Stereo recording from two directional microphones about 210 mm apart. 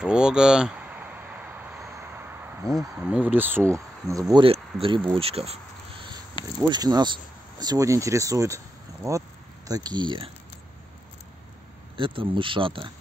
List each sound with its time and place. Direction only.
0.0 s speech: 5° right (ahead or behind); by 5.6 s 30° right (ahead or behind)
6.6 s speech: 20° right (ahead or behind)
12.0 s speech: 25° right (ahead or behind)